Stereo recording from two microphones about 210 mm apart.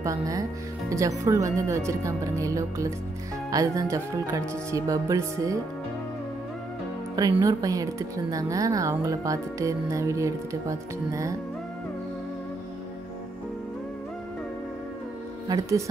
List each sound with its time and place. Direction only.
0.0 s a woman's voice: 15° right (ahead or behind)
7.2 s a woman's voice: 15° right (ahead or behind)
15.4 s speech: 15° right (ahead or behind)